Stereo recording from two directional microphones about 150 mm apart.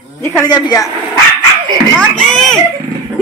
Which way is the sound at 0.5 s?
25° left (ahead or behind).